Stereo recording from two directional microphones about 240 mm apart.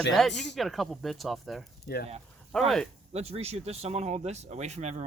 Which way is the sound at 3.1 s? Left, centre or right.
Right.